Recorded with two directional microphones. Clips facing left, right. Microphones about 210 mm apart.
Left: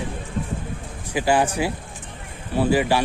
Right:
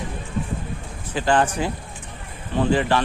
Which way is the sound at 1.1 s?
10° left (ahead or behind).